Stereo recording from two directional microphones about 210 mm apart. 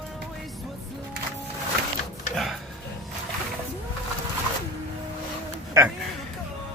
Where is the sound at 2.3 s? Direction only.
Centre (ahead or behind).